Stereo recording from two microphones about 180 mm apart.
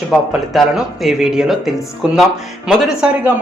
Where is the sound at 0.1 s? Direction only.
Centre (ahead or behind).